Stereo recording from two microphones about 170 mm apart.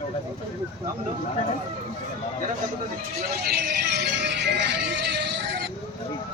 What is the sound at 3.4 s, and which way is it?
Music, 80° right.